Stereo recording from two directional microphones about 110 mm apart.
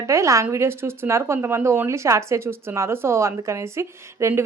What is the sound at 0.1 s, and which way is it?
Speech, 25° right (ahead or behind).